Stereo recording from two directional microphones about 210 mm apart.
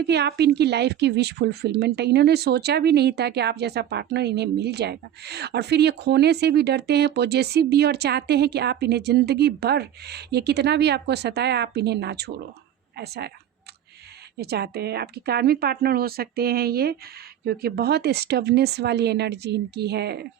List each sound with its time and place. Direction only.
0.0 s a woman's voice: 50° right (ahead or behind)
14.3 s a woman's voice: 50° right (ahead or behind)